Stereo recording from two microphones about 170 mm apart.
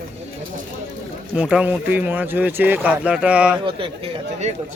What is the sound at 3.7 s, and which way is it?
Speech, 30° right (ahead or behind).